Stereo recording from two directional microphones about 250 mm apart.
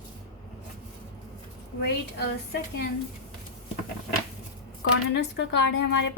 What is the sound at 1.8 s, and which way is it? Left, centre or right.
A woman's voice, left.